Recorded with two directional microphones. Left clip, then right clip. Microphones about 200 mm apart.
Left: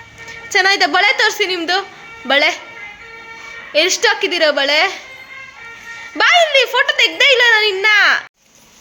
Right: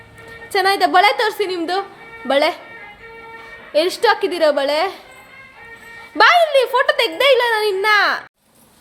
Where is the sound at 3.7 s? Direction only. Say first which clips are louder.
Left 2 dB; 20° right (ahead or behind).